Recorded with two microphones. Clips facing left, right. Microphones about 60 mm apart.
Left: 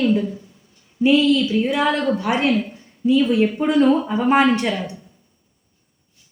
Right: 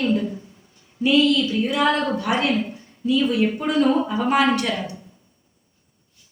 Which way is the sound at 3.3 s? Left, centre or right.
Left.